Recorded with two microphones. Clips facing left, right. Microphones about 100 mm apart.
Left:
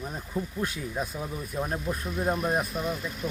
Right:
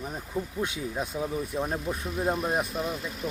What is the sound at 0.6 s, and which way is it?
Speech, 20° right (ahead or behind).